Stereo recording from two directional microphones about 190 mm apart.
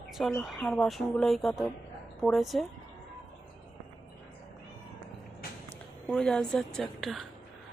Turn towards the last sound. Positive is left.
turn(degrees=0)  # may be behind; listen again after turning